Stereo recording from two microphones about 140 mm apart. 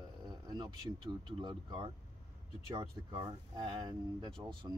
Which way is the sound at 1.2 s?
35° right (ahead or behind).